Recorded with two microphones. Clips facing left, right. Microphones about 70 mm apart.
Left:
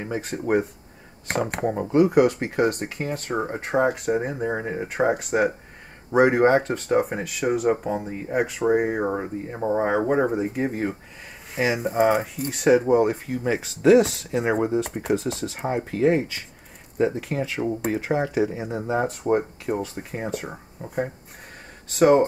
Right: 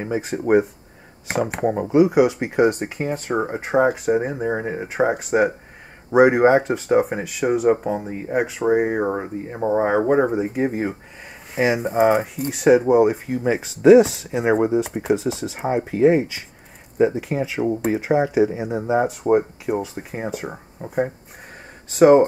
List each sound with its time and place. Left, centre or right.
0.0 s speech: centre
20.8 s speech: right
21.8 s speech: centre